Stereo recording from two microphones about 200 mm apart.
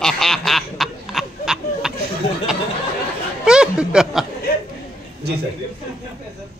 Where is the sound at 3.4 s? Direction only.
5° right (ahead or behind).